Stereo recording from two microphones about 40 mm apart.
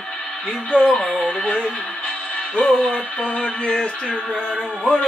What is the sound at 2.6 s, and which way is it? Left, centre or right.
Music, left.